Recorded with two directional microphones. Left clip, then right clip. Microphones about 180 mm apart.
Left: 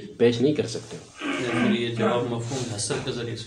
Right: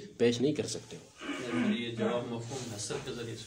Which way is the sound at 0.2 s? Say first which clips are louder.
Left 8 dB; 30° right (ahead or behind).